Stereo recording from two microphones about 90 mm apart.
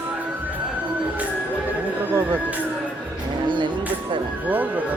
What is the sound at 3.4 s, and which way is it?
Music, 60° right (ahead or behind).